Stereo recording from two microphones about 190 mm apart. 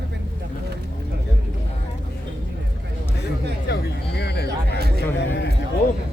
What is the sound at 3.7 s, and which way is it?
Music, 60° left (ahead or behind).